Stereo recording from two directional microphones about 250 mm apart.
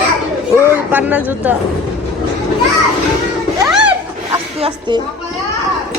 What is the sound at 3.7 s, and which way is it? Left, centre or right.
Boat, centre.